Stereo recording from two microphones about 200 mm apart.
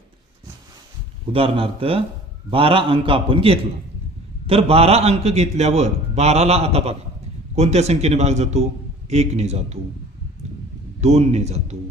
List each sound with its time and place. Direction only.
1.3 s a man's voice: 25° right (ahead or behind)
11.0 s a man's voice: 35° right (ahead or behind)